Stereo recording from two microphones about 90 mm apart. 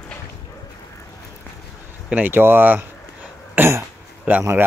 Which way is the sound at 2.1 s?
20° right (ahead or behind).